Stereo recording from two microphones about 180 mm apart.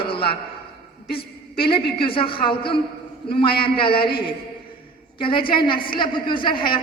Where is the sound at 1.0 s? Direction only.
60° left (ahead or behind).